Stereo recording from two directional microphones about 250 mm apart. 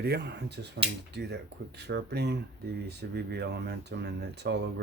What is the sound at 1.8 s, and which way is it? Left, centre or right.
Speech, right.